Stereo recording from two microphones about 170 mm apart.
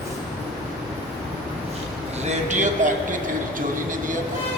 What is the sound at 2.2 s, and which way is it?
Speech, 45° right (ahead or behind).